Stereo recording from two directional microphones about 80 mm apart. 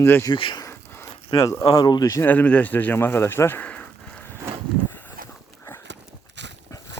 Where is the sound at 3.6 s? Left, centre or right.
Centre.